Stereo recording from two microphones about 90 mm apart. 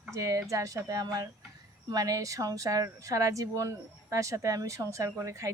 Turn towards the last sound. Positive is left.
turn(degrees=-35)  # may be behind; listen again after turning